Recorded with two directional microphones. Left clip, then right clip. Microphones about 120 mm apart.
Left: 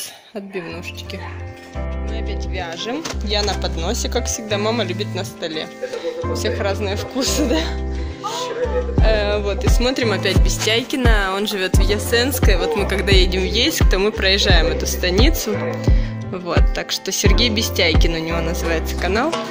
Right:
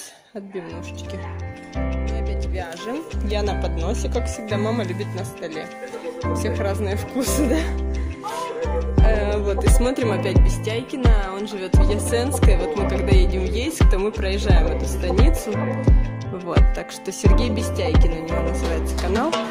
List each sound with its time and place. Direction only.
2.9 s speech: 25° right (ahead or behind)
4.5 s music: 15° right (ahead or behind)
6.4 s speech: 20° right (ahead or behind)
7.2 s speech: 35° right (ahead or behind)
9.0 s speech: 20° right (ahead or behind)
12.4 s music: 20° right (ahead or behind)
16.7 s speech: 25° right (ahead or behind)
17.8 s music: 5° right (ahead or behind)